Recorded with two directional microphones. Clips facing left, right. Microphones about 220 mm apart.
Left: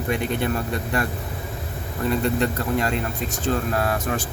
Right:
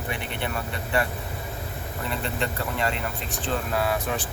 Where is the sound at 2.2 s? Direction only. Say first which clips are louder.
Left 7 dB; 45° left (ahead or behind).